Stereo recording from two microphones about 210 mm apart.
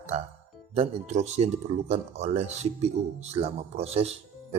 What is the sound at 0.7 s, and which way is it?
Speech, 30° right (ahead or behind).